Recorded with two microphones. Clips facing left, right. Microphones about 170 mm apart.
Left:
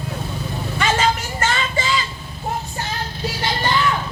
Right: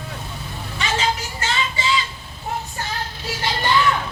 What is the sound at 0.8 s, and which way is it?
Vehicle, 50° left (ahead or behind).